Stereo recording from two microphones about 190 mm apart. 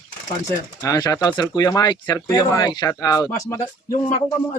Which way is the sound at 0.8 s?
20° left (ahead or behind).